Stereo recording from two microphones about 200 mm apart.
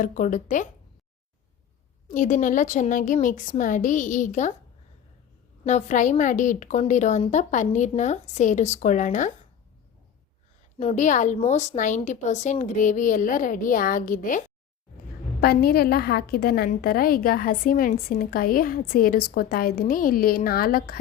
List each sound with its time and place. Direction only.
0.0 s a woman's voice: 40° left (ahead or behind)
2.0 s a woman's voice: 40° left (ahead or behind)
5.6 s a woman's voice: 35° left (ahead or behind)
10.8 s a woman's voice: 35° left (ahead or behind)